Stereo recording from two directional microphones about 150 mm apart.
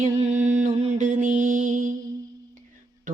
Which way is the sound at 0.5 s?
55° right (ahead or behind).